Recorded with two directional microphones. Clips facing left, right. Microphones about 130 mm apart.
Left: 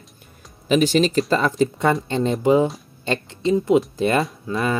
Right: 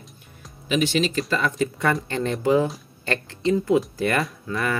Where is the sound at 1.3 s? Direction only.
30° left (ahead or behind).